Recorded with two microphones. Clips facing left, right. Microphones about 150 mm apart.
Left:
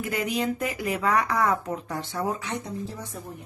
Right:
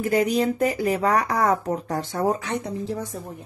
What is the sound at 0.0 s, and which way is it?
Speech, 35° right (ahead or behind).